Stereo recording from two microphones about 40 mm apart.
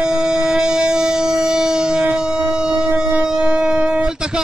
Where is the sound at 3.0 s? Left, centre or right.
Right.